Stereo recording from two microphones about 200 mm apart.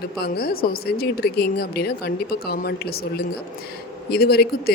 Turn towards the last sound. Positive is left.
turn(degrees=50)  # may be behind; listen again after turning